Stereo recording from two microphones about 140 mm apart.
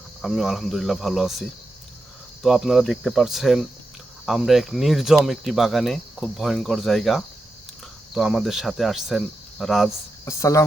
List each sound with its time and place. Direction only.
0.2 s speech: centre (ahead or behind)
10.2 s speech: 20° left (ahead or behind)